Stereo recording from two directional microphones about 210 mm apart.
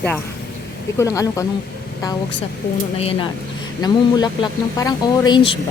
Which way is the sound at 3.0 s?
30° left (ahead or behind).